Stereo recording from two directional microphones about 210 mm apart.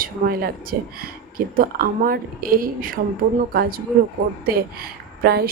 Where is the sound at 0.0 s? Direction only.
45° right (ahead or behind).